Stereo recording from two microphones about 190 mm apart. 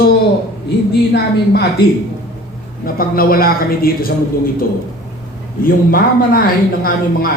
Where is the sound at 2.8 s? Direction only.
50° left (ahead or behind).